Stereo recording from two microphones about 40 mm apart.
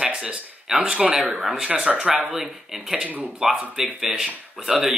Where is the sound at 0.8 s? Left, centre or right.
Right.